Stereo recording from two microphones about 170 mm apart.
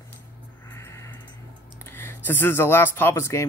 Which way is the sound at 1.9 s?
15° left (ahead or behind).